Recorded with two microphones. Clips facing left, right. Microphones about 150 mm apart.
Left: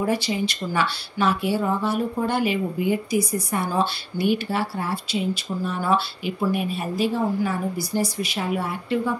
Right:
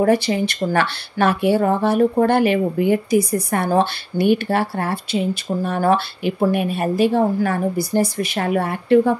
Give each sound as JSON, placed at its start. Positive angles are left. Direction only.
{"t": 0.0, "sound": "speech", "side_deg": -55}